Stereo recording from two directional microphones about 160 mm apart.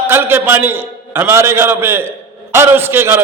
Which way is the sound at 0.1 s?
15° right (ahead or behind).